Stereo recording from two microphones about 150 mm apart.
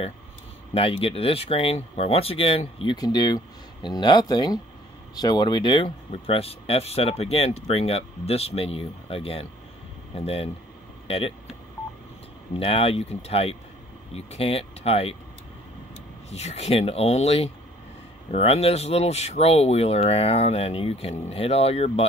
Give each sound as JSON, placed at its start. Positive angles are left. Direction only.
{"t": 0.7, "sound": "speech", "side_deg": 40}
{"t": 12.5, "sound": "speech", "side_deg": 40}
{"t": 16.3, "sound": "speech", "side_deg": 45}